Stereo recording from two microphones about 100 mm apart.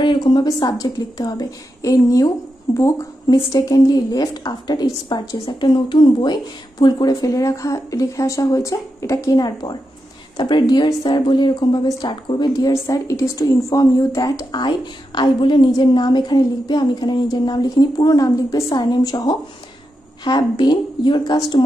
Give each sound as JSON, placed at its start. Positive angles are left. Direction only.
{"t": 0.0, "sound": "a woman's voice", "side_deg": 50}